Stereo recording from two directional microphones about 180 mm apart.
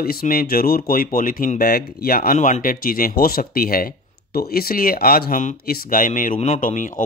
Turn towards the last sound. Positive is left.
turn(degrees=45)  # may be behind; listen again after turning